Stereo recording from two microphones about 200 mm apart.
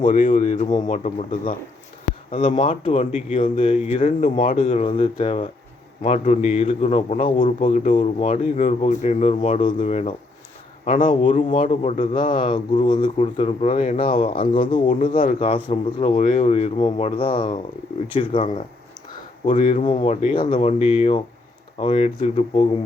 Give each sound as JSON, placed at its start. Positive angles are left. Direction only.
{"t": 0.0, "sound": "speech", "side_deg": 40}
{"t": 2.6, "sound": "speech", "side_deg": 25}
{"t": 14.5, "sound": "speech", "side_deg": 25}
{"t": 14.8, "sound": "speech", "side_deg": 40}
{"t": 15.4, "sound": "speech", "side_deg": 25}
{"t": 19.5, "sound": "speech", "side_deg": 30}